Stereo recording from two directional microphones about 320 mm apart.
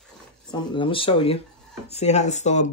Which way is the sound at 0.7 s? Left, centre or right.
Centre.